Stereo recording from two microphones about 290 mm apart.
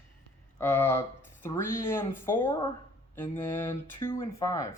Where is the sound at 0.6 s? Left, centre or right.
Centre.